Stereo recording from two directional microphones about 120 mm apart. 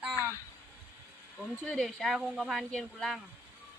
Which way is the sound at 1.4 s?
5° left (ahead or behind).